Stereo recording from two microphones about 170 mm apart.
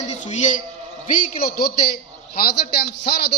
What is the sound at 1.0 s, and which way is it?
A man's voice, 60° left (ahead or behind).